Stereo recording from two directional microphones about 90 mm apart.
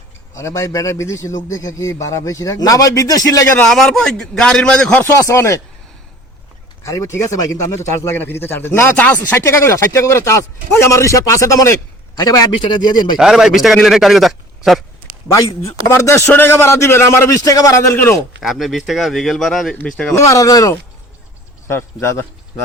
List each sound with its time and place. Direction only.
0.3 s speech: 35° left (ahead or behind)
3.7 s a man's voice: 5° left (ahead or behind)
5.1 s speech: 30° left (ahead or behind)
6.8 s speech: 35° left (ahead or behind)
12.1 s speech: 50° left (ahead or behind)
13.1 s a man's voice: 5° right (ahead or behind)
15.3 s speech: 35° left (ahead or behind)
17.9 s a man's voice: 20° left (ahead or behind)
18.4 s a man's voice: centre (ahead or behind)
20.1 s speech: 35° left (ahead or behind)
21.7 s a man's voice: 30° left (ahead or behind)